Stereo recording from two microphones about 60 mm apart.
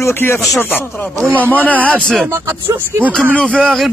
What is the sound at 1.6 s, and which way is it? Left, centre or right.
Music, left.